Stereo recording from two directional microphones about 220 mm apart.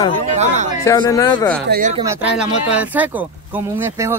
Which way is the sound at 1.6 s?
40° right (ahead or behind).